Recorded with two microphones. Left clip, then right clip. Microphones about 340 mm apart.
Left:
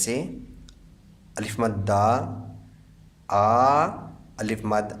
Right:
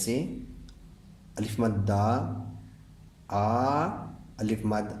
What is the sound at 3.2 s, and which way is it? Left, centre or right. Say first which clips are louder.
Speech: left 8 dB; left.